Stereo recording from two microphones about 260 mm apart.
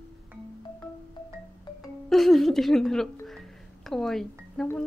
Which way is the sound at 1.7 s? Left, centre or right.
Centre.